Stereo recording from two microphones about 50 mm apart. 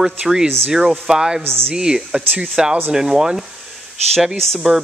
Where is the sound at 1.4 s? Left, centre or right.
Right.